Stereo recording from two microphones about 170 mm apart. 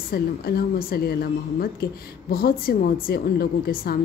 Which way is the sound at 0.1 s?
65° left (ahead or behind).